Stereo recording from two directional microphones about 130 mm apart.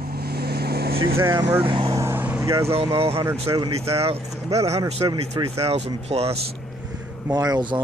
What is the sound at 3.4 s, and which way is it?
Speech, 40° right (ahead or behind).